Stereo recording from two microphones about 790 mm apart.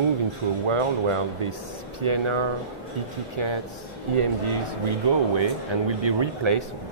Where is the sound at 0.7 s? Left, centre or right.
Right.